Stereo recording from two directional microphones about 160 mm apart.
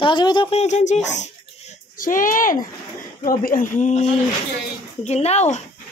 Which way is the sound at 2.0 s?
55° left (ahead or behind).